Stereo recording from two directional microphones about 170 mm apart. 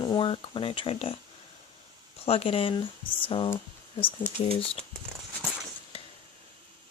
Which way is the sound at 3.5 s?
35° left (ahead or behind).